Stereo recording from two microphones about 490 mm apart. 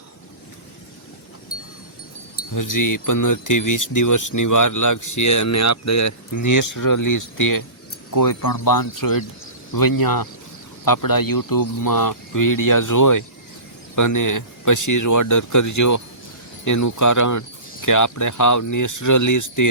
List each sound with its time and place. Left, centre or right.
2.6 s speech: left